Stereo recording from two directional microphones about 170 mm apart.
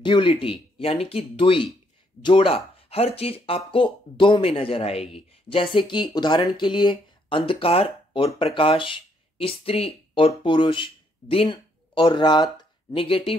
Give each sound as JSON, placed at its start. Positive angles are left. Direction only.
{"t": 0.0, "sound": "speech", "side_deg": 30}